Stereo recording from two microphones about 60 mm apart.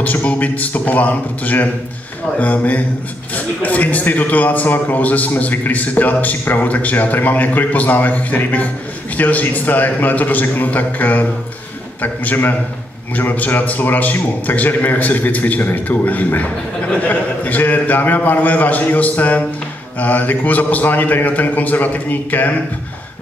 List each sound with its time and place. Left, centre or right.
0.0 s a man's voice: left